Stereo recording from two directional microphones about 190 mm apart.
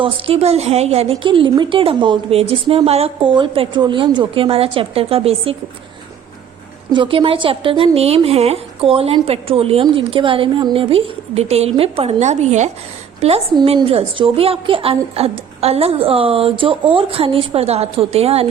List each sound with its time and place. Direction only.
0.0 s a woman's voice: 30° right (ahead or behind)
6.9 s a woman's voice: 25° right (ahead or behind)